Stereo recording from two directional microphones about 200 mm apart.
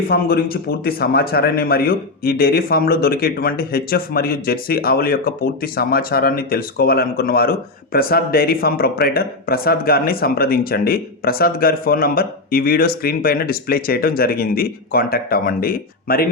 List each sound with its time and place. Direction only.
0.1 s speech: 50° left (ahead or behind)